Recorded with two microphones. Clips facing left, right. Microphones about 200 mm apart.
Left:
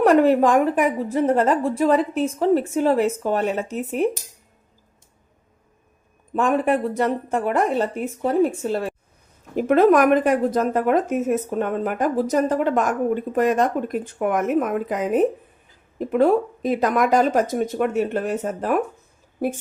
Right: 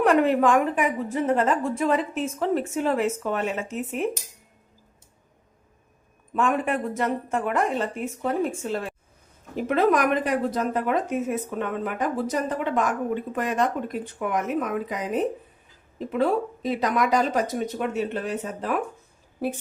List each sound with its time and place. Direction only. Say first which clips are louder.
0.0 s a woman's voice: left 4 dB; 40° left (ahead or behind)
6.3 s a woman's voice: left 4 dB; 35° left (ahead or behind)
9.6 s speech: left 6 dB; 50° left (ahead or behind)